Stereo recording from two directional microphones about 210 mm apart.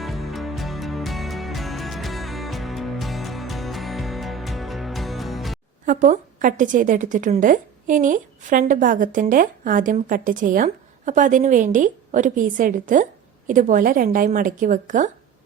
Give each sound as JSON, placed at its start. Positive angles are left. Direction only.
{"t": 0.0, "sound": "music", "side_deg": 0}
{"t": 5.8, "sound": "a woman's voice", "side_deg": -35}